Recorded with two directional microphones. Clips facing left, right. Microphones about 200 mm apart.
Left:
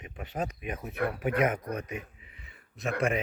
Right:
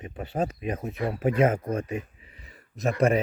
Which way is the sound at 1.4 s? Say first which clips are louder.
Right 6 dB; 30° right (ahead or behind).